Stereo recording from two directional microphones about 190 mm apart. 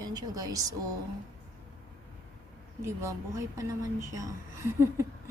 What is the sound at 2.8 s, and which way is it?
Speech, 15° right (ahead or behind).